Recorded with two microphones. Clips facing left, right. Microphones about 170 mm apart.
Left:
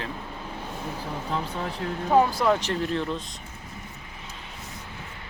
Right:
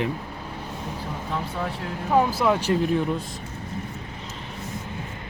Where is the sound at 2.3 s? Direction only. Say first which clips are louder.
Right 2 dB; 5° right (ahead or behind).